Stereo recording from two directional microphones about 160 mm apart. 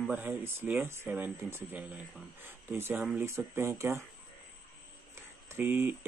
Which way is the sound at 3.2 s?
15° right (ahead or behind).